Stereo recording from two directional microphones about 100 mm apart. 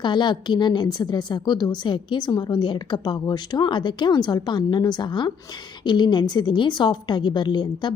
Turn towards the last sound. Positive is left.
turn(degrees=45)  # may be behind; listen again after turning